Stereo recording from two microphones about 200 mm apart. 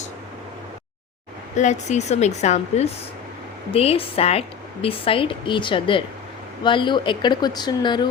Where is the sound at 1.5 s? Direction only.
35° left (ahead or behind).